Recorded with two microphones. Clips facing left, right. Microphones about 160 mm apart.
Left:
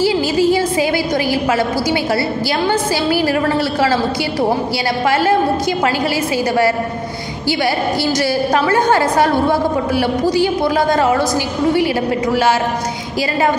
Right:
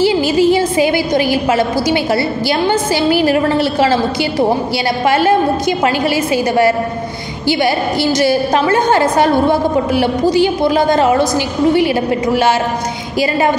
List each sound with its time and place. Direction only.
0.0 s a woman's voice: 20° right (ahead or behind)